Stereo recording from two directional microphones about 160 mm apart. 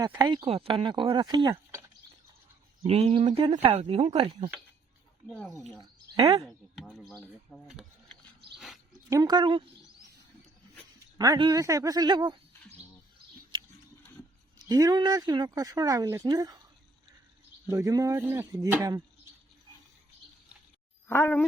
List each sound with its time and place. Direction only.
0.2 s speech: 25° right (ahead or behind)
0.4 s speech: 40° right (ahead or behind)
2.8 s speech: 40° right (ahead or behind)
5.2 s speech: 5° left (ahead or behind)
6.7 s speech: 5° left (ahead or behind)
8.5 s a sound: centre (ahead or behind)
9.0 s speech: 25° right (ahead or behind)
11.2 s speech: 25° right (ahead or behind)
14.6 s speech: 25° right (ahead or behind)
17.7 s speech: 20° right (ahead or behind)
21.1 s speech: 15° left (ahead or behind)